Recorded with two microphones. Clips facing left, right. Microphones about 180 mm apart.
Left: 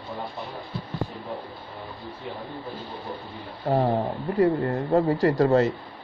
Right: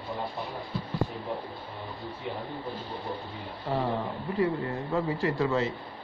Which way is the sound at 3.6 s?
50° left (ahead or behind).